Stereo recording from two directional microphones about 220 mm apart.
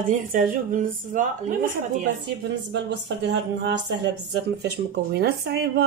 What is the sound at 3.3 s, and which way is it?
Speech, 55° right (ahead or behind).